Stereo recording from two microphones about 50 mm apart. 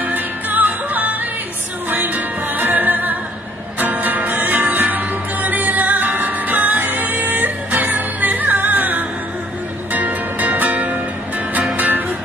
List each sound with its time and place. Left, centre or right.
0.0 s music: right